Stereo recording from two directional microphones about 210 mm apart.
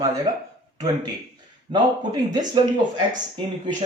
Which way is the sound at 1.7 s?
20° right (ahead or behind).